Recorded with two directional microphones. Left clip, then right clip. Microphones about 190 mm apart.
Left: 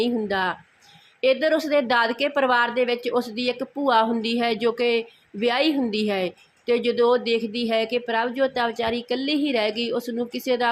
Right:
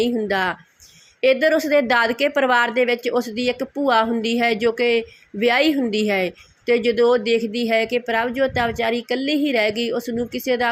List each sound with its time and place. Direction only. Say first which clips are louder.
0.0 s a woman's voice: right 3 dB; 15° right (ahead or behind)